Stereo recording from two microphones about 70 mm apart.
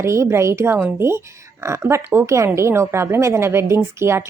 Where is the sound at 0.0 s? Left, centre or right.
Right.